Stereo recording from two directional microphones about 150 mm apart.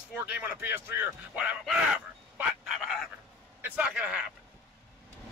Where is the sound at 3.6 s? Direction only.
10° right (ahead or behind).